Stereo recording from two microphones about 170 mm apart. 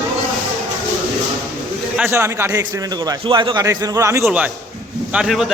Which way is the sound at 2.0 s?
15° right (ahead or behind).